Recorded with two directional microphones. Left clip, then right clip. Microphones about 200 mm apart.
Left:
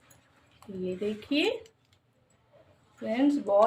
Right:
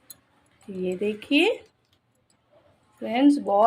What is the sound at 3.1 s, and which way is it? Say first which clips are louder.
Speech: right 6 dB; 50° right (ahead or behind).